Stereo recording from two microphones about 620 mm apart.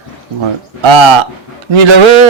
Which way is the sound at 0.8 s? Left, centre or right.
Right.